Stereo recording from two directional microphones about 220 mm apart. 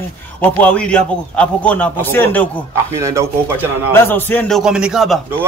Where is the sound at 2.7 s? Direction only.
15° right (ahead or behind).